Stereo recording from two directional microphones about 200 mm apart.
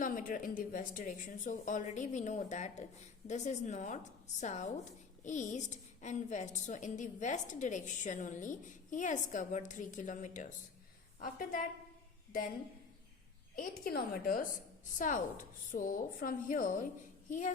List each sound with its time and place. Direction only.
0.0 s a woman's voice: 40° left (ahead or behind)
13.6 s a woman's voice: 45° left (ahead or behind)